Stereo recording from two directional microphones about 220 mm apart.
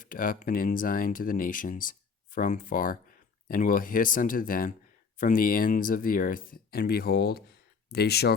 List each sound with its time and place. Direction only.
0.0 s speech: 40° left (ahead or behind)